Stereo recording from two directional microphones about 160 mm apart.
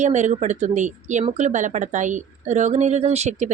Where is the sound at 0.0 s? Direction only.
50° right (ahead or behind).